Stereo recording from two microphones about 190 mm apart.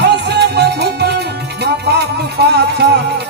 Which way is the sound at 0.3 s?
60° right (ahead or behind).